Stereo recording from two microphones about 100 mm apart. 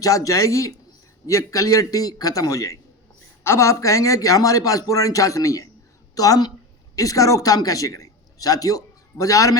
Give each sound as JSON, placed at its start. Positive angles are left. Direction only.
{"t": 0.0, "sound": "a man's voice", "side_deg": 35}